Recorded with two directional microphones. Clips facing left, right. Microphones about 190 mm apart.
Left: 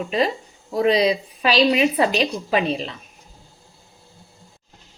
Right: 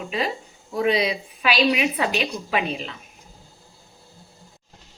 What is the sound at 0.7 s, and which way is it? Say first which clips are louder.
A woman's voice: left 4 dB; 35° left (ahead or behind).